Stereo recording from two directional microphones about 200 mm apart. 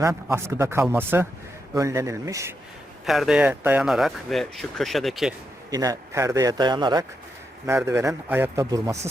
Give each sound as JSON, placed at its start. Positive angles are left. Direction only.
{"t": 0.0, "sound": "a man's voice", "side_deg": -15}
{"t": 3.1, "sound": "speech", "side_deg": 0}
{"t": 5.7, "sound": "a man's voice", "side_deg": -15}